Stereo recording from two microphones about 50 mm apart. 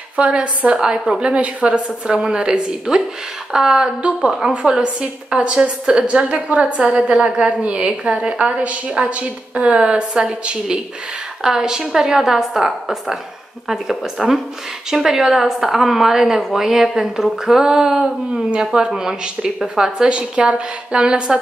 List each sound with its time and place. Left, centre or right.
0.1 s a woman's voice: right
0.7 s a woman's voice: centre
1.2 s a woman's voice: right
2.0 s a woman's voice: centre
11.4 s a woman's voice: centre
20.1 s a woman's voice: right